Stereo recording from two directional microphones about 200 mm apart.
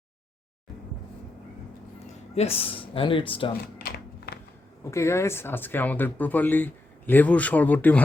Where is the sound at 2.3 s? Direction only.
30° left (ahead or behind).